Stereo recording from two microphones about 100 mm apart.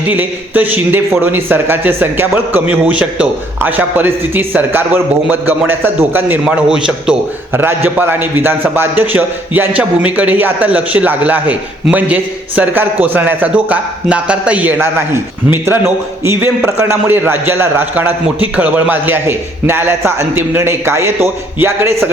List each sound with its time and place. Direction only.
0.1 s a man's voice: 15° right (ahead or behind)
7.5 s a man's voice: 20° right (ahead or behind)